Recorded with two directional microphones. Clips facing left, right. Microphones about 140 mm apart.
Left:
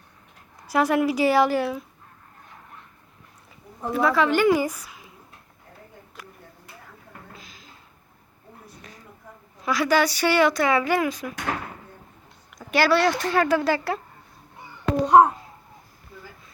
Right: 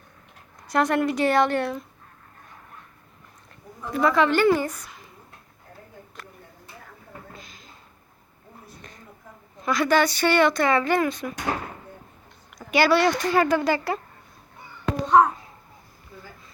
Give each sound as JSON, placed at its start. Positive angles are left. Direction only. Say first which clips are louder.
{"t": 0.7, "sound": "speech", "louder": "left 1 dB", "side_deg": 5}
{"t": 3.9, "sound": "speech", "louder": "right 1 dB", "side_deg": 5}
{"t": 7.3, "sound": "a sound", "louder": "right 1 dB", "side_deg": 0}
{"t": 9.6, "sound": "speech", "louder": "even", "side_deg": 5}
{"t": 12.5, "sound": "speech", "louder": "right 1 dB", "side_deg": 0}
{"t": 15.0, "sound": "a child's voice", "louder": "left 2 dB", "side_deg": 35}